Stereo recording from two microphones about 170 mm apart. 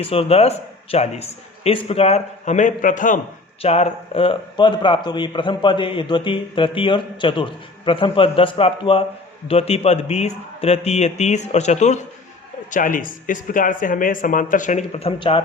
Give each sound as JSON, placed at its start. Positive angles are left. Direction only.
{"t": 0.0, "sound": "speech", "side_deg": 35}
{"t": 3.6, "sound": "speech", "side_deg": 35}